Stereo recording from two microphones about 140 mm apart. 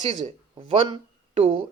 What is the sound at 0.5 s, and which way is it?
Speech, 35° right (ahead or behind).